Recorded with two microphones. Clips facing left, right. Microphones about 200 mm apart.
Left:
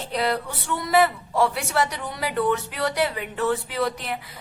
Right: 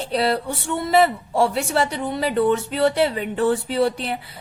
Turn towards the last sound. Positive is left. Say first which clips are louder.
# right 5 dB
turn(degrees=-30)  # may be behind; listen again after turning